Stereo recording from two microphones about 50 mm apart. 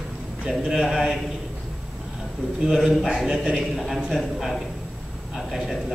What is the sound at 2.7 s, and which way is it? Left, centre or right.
Speech, centre.